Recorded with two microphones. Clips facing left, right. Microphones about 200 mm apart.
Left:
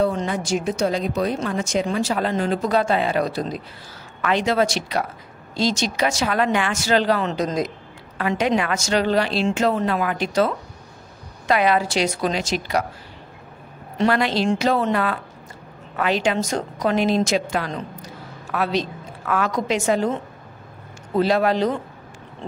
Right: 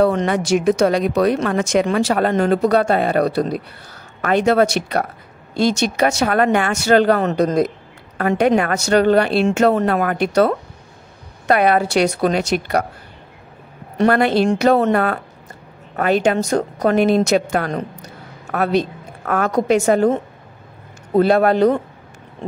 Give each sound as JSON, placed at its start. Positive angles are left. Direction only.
{"t": 0.0, "sound": "a woman's voice", "side_deg": -70}
{"t": 13.9, "sound": "a woman's voice", "side_deg": -55}